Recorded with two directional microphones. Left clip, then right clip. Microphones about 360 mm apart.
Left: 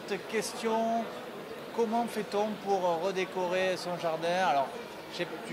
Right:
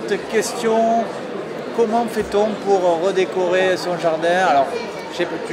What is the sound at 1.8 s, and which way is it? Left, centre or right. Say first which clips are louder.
Speech: right 12 dB; left.